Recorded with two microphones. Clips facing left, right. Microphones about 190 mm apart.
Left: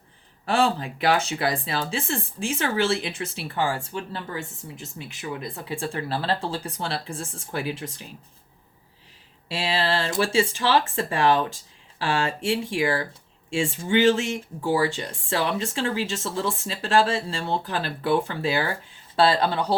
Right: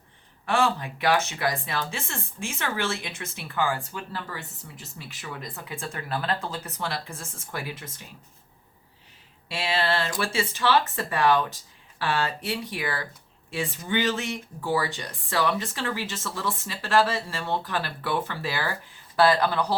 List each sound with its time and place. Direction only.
0.4 s speech: 30° left (ahead or behind)
9.5 s speech: 30° left (ahead or behind)